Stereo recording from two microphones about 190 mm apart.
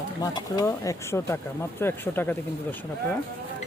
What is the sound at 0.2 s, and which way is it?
Speech, 20° left (ahead or behind).